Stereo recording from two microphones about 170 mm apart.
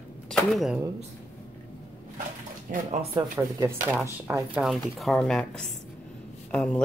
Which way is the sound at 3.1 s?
20° right (ahead or behind).